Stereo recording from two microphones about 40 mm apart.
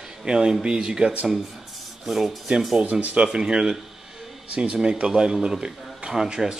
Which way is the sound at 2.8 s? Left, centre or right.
Right.